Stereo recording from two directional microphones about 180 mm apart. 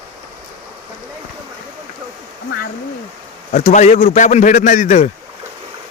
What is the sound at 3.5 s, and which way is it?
A man's voice, 40° left (ahead or behind).